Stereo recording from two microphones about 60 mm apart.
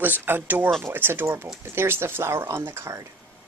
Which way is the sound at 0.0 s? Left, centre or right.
Right.